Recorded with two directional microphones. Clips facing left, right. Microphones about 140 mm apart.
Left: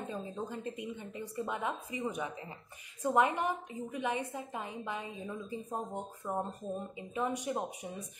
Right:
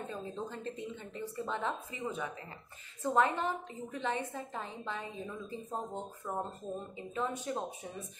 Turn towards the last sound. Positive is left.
turn(degrees=15)  # may be behind; listen again after turning